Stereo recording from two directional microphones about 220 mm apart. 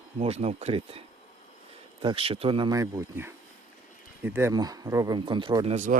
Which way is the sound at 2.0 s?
25° right (ahead or behind).